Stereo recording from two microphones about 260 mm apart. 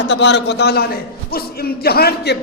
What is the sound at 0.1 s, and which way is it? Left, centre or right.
A man's voice, left.